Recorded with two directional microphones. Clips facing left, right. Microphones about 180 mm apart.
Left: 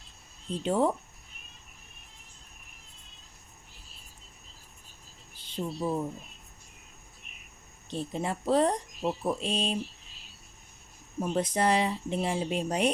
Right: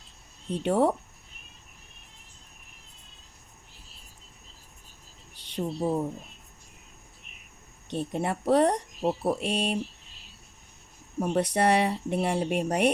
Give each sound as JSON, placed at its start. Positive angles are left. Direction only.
{"t": 0.5, "sound": "speech", "side_deg": -65}
{"t": 5.6, "sound": "speech", "side_deg": -45}
{"t": 7.9, "sound": "speech", "side_deg": -65}
{"t": 9.0, "sound": "speech", "side_deg": -35}
{"t": 9.3, "sound": "speech", "side_deg": -65}
{"t": 11.2, "sound": "speech", "side_deg": -65}